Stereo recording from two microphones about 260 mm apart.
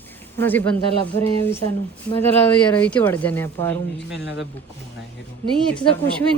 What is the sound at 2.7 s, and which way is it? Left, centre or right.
Speech, centre.